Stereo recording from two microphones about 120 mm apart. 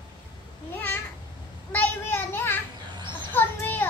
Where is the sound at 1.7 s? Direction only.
15° left (ahead or behind).